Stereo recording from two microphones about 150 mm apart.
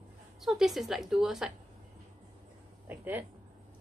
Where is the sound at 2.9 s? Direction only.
15° right (ahead or behind).